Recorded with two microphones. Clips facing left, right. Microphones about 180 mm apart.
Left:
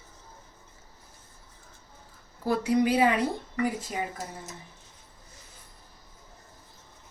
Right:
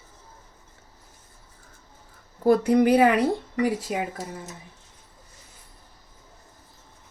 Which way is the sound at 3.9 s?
90° right.